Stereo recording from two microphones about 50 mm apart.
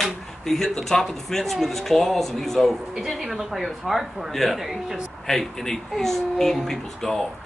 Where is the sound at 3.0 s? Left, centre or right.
Centre.